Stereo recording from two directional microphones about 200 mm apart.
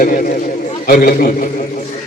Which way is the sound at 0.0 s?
45° left (ahead or behind).